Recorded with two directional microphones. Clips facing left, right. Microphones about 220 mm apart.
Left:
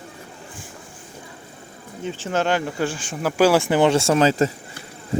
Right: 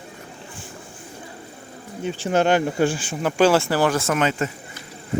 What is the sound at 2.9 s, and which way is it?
Speech, 5° right (ahead or behind).